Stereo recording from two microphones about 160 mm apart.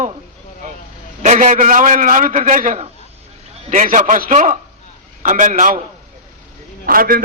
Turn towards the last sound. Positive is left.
turn(degrees=-65)  # may be behind; listen again after turning